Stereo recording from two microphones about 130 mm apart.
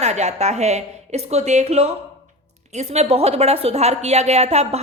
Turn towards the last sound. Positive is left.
turn(degrees=-55)  # may be behind; listen again after turning